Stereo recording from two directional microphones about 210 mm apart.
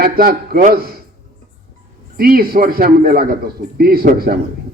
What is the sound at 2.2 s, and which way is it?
A man's voice, 45° right (ahead or behind).